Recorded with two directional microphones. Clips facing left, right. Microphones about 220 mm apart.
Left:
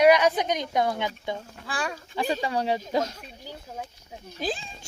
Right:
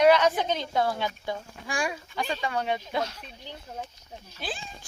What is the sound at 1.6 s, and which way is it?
Speech, 10° right (ahead or behind).